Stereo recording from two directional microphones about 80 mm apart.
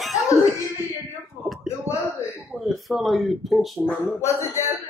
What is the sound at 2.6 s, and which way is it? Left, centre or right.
Speech, centre.